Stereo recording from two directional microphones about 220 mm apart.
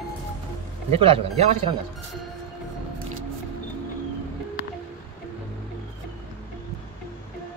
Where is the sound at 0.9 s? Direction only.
25° right (ahead or behind).